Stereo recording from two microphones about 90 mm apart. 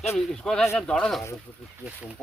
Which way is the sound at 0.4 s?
5° left (ahead or behind).